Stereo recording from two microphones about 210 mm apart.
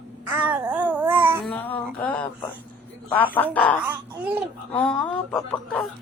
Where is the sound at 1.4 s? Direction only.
5° left (ahead or behind).